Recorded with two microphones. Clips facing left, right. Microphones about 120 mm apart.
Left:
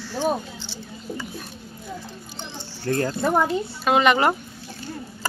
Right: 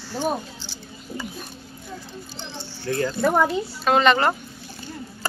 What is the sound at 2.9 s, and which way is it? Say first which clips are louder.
Speech: left 2 dB; 45° left (ahead or behind).